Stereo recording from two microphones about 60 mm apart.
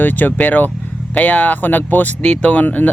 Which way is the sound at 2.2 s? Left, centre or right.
Left.